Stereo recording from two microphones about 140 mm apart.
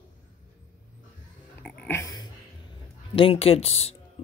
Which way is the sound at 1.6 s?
5° left (ahead or behind).